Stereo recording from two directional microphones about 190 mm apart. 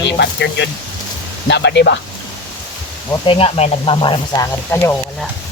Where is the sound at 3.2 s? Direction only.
30° left (ahead or behind).